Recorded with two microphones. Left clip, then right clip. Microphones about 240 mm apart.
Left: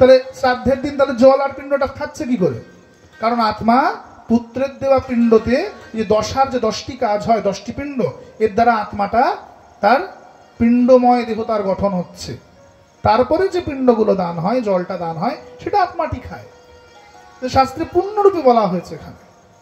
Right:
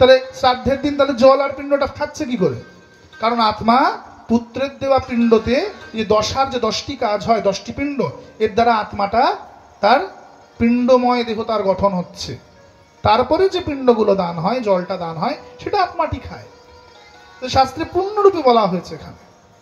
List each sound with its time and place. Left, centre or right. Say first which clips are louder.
0.0 s speech: left 1 dB; right
10.6 s speech: left 2 dB; right
17.4 s speech: even; right